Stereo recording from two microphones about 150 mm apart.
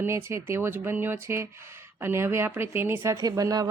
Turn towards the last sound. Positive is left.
turn(degrees=-25)  # may be behind; listen again after turning